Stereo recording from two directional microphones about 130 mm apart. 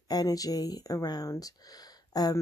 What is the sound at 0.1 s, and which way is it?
Speech, 30° left (ahead or behind).